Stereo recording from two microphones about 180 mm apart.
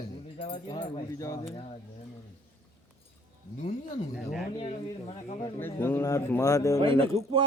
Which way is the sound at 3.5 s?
40° left (ahead or behind).